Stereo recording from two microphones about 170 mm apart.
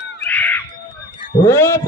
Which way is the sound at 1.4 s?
15° left (ahead or behind).